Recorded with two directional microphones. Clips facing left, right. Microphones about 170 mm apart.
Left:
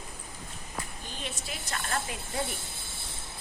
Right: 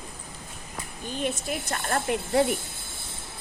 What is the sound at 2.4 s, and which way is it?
Speech, 70° right (ahead or behind).